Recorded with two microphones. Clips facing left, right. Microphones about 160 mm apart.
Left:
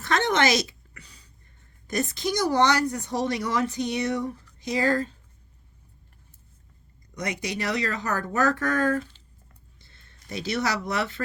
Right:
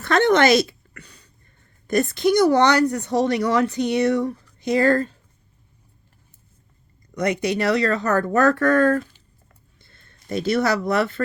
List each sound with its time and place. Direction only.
0.0 s a sound: 60° right (ahead or behind)
1.9 s speech: 60° right (ahead or behind)
7.1 s speech: 60° right (ahead or behind)